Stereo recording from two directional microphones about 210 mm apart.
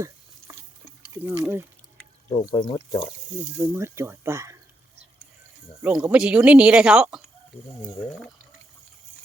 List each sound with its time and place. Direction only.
1.1 s speech: 15° right (ahead or behind)
2.3 s speech: 25° left (ahead or behind)
3.6 s speech: 15° right (ahead or behind)
5.8 s speech: 5° right (ahead or behind)